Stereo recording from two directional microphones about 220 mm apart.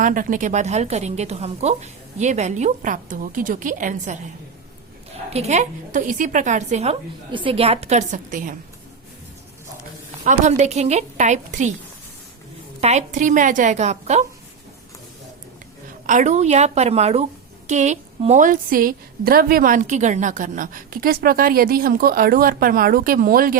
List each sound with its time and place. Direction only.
0.0 s a woman's voice: 40° right (ahead or behind)
5.3 s a woman's voice: 30° right (ahead or behind)
10.2 s a woman's voice: 30° right (ahead or behind)
12.8 s a woman's voice: 30° right (ahead or behind)
16.0 s a woman's voice: 35° right (ahead or behind)